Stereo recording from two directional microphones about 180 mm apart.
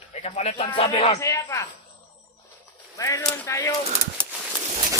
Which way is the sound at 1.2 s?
15° left (ahead or behind).